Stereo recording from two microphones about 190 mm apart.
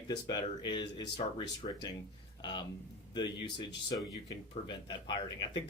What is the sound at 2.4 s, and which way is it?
Speech, 20° left (ahead or behind).